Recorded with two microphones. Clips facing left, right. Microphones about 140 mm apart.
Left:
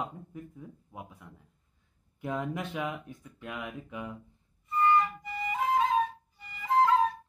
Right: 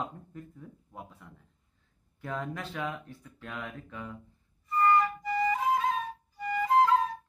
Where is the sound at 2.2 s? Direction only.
20° left (ahead or behind).